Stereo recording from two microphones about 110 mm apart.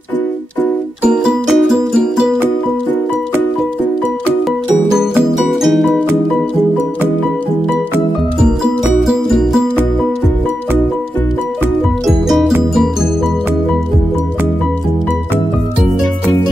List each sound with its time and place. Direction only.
1.1 s music: 5° right (ahead or behind)
5.6 s music: centre (ahead or behind)
9.0 s music: centre (ahead or behind)
12.1 s music: 5° right (ahead or behind)